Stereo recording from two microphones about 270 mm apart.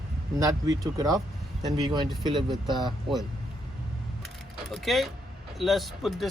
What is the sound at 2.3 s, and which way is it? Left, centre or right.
Speech, centre.